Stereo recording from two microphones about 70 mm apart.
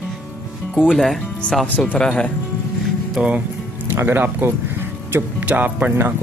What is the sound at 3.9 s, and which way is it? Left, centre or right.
Speech, right.